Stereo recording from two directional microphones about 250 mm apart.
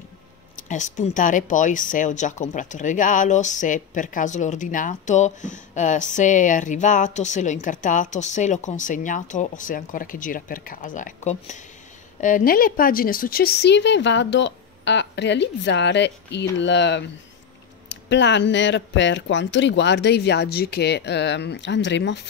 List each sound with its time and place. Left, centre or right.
0.6 s speech: left